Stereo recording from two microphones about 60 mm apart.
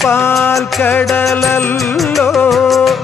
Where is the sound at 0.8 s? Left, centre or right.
Left.